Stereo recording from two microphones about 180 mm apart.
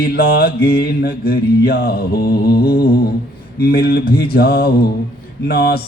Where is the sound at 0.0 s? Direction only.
60° left (ahead or behind).